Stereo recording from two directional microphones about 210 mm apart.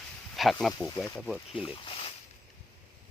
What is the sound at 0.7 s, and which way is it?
Speech, 15° left (ahead or behind).